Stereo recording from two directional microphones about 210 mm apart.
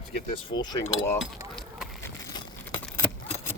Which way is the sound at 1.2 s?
Centre (ahead or behind).